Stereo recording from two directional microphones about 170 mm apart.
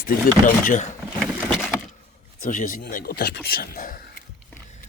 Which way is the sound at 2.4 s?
55° left (ahead or behind).